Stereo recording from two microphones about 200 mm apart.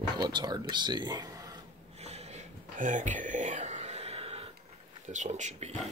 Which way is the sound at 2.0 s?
30° right (ahead or behind).